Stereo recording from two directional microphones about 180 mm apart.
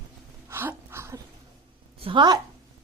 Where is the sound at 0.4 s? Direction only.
10° right (ahead or behind).